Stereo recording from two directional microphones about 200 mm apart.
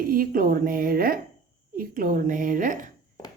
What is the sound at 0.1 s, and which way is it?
A woman's voice, 45° right (ahead or behind).